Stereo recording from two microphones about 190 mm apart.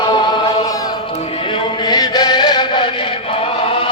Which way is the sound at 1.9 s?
20° left (ahead or behind).